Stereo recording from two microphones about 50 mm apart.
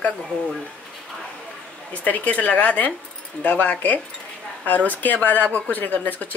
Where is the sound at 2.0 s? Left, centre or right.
Left.